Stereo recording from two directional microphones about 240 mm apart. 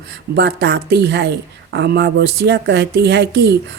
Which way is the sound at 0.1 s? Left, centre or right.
Right.